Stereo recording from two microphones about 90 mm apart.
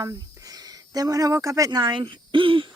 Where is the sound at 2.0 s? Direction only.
70° right (ahead or behind).